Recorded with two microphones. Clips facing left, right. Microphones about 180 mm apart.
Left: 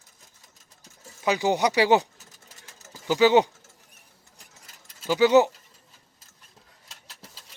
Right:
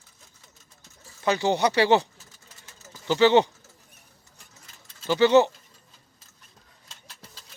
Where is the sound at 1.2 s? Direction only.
10° left (ahead or behind).